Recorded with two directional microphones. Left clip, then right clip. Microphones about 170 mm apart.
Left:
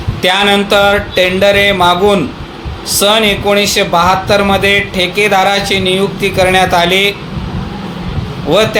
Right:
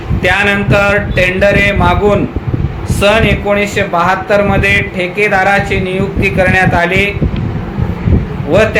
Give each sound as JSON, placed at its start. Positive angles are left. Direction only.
{"t": 0.2, "sound": "speech", "side_deg": 45}